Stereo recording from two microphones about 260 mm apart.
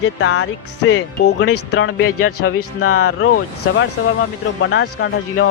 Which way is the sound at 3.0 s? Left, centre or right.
Left.